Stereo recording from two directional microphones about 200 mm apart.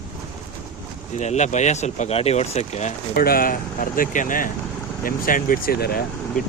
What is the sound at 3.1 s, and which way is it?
A man's voice, 45° left (ahead or behind).